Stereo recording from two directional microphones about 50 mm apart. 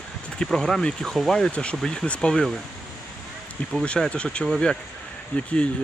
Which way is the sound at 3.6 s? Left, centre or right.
Left.